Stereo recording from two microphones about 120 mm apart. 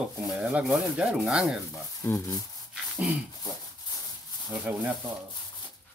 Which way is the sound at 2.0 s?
25° left (ahead or behind).